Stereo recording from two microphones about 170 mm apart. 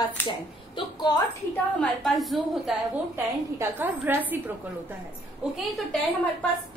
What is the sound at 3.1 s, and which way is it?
A woman's voice, 10° right (ahead or behind).